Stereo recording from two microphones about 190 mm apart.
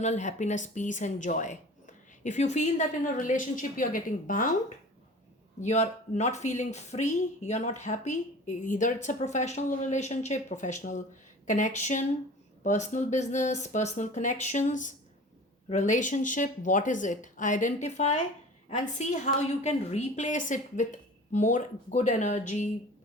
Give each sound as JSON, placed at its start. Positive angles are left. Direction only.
{"t": 0.0, "sound": "speech", "side_deg": 40}
{"t": 5.5, "sound": "speech", "side_deg": 35}